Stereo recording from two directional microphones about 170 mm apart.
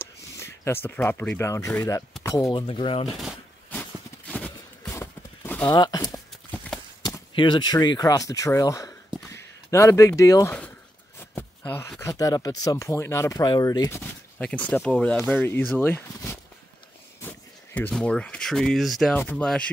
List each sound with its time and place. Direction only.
0.0 s speech: 15° left (ahead or behind); by 3.2 s 35° left (ahead or behind)
4.8 s clip-clop: 15° left (ahead or behind)
5.7 s speech: 20° left (ahead or behind)
11.3 s a sound: 15° left (ahead or behind)
12.0 s speech: 20° left (ahead or behind)
17.7 s speech: 10° left (ahead or behind)